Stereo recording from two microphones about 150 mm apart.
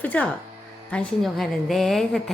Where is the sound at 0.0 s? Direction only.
10° left (ahead or behind).